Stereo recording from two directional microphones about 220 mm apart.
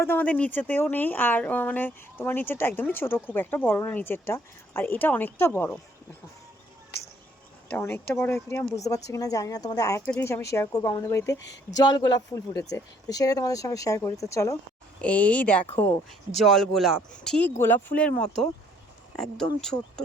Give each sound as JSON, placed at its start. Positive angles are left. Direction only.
{"t": 0.0, "sound": "speech", "side_deg": 10}
{"t": 7.7, "sound": "speech", "side_deg": 10}
{"t": 11.3, "sound": "speech", "side_deg": 55}
{"t": 11.8, "sound": "speech", "side_deg": 20}